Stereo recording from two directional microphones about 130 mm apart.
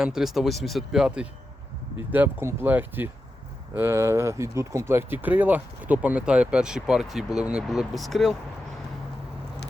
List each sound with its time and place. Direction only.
0.0 s speech: 5° right (ahead or behind)
2.1 s speech: 15° right (ahead or behind); by 8.4 s centre (ahead or behind)